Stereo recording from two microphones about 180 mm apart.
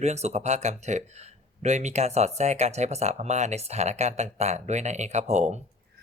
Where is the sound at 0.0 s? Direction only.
40° right (ahead or behind).